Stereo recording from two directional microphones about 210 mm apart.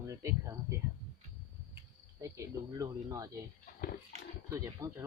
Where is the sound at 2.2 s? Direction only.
15° right (ahead or behind).